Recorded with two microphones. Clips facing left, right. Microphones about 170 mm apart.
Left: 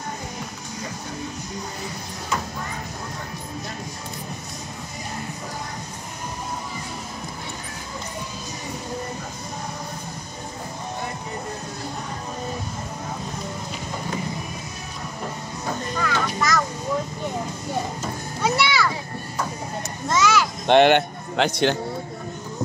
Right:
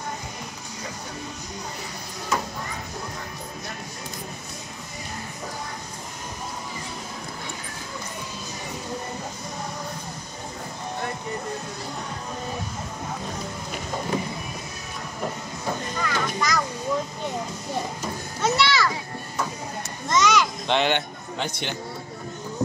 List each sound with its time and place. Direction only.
16.0 s music: centre (ahead or behind)
18.4 s children playing: 10° left (ahead or behind)
20.1 s children playing: 5° left (ahead or behind)
20.6 s a sound: 55° left (ahead or behind)
21.4 s a man's voice: 90° left